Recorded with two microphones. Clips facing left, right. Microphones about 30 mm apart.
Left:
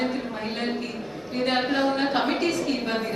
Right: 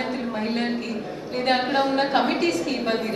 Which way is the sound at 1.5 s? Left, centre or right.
Right.